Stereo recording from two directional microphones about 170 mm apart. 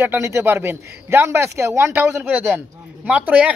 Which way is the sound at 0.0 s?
15° right (ahead or behind).